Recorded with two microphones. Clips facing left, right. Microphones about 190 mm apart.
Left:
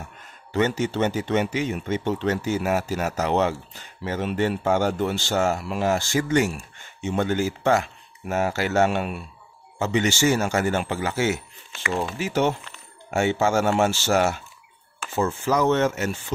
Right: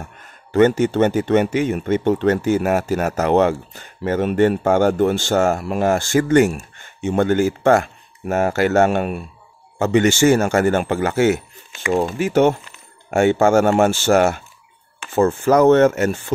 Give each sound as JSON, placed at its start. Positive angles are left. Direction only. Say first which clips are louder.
{"t": 0.2, "sound": "speech", "louder": "right 9 dB", "side_deg": -55}